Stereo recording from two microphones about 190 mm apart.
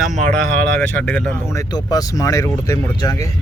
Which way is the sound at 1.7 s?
20° left (ahead or behind).